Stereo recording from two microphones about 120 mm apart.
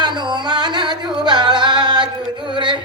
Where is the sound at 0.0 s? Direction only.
40° right (ahead or behind).